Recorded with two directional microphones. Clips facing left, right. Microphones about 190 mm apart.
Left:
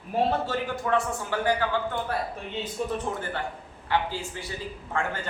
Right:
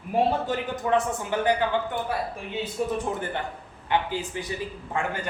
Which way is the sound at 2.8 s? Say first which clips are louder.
Right 3 dB; 5° right (ahead or behind).